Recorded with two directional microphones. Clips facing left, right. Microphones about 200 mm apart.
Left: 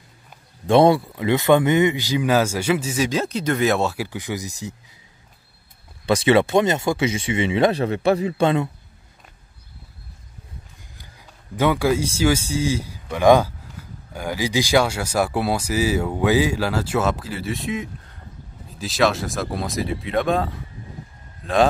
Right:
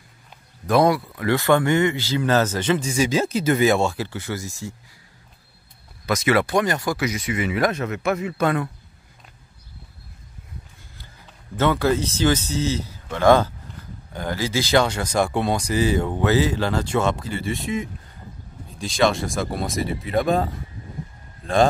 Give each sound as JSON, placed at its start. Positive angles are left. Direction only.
{"t": 0.7, "sound": "speech", "side_deg": 25}
{"t": 6.0, "sound": "speech", "side_deg": 30}
{"t": 11.5, "sound": "speech", "side_deg": 10}